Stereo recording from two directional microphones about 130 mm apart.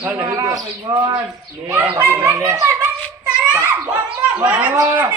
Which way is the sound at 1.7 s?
15° right (ahead or behind).